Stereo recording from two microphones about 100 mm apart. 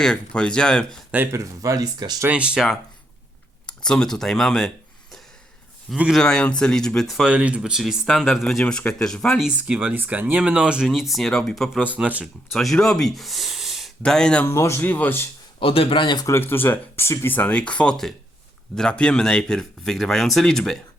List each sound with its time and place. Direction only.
0.0 s speech: 10° left (ahead or behind)
1.3 s speech: 35° right (ahead or behind)
2.2 s speech: 10° right (ahead or behind)
3.8 s speech: 5° left (ahead or behind)
6.1 s speech: 5° left (ahead or behind)
7.3 s speech: 10° right (ahead or behind); by 9.4 s 5° left (ahead or behind)
9.4 s speech: 10° right (ahead or behind)
11.1 s speech: 5° left (ahead or behind)
11.8 s speech: 10° right (ahead or behind)
12.5 s speech: 5° left (ahead or behind)
14.4 s speech: 30° left (ahead or behind)
15.6 s speech: 70° left (ahead or behind); by 16.2 s 55° left (ahead or behind)
16.2 s speech: 25° left (ahead or behind); by 20.8 s 5° left (ahead or behind)